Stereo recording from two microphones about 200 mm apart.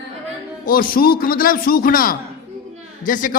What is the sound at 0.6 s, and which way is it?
A man's voice, 45° left (ahead or behind).